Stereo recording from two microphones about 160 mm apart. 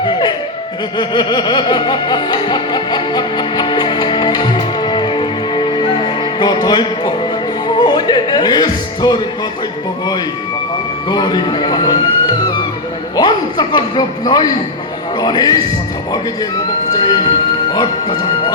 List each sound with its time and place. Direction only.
0.0 s music: 30° left (ahead or behind)
7.7 s speech: 25° left (ahead or behind)
11.1 s speech: 25° left (ahead or behind)
16.9 s speech: 30° left (ahead or behind)